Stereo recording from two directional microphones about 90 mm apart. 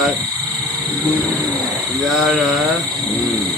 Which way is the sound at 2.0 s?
5° right (ahead or behind).